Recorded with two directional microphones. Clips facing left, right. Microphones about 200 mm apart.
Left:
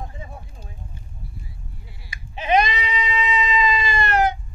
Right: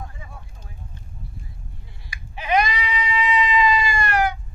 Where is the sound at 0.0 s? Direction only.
25° left (ahead or behind).